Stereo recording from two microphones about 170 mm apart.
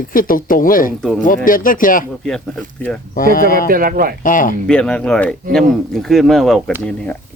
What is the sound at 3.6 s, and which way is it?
Speech, 55° right (ahead or behind).